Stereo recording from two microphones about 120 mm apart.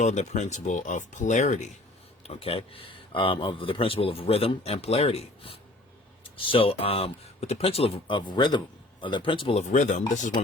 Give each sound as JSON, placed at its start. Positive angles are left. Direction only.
{"t": 0.0, "sound": "speech", "side_deg": 80}
{"t": 2.2, "sound": "speech", "side_deg": 55}
{"t": 9.6, "sound": "speech", "side_deg": 90}